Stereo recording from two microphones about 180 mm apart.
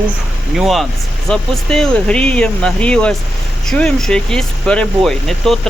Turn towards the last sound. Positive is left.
turn(degrees=0)  # may be behind; listen again after turning